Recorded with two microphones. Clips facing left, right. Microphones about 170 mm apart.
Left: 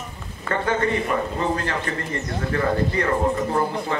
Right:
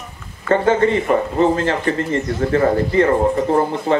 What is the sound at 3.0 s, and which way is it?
Speech, 45° right (ahead or behind).